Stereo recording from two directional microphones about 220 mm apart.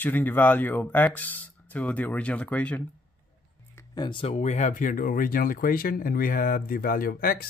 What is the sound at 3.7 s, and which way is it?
Speech, 20° left (ahead or behind).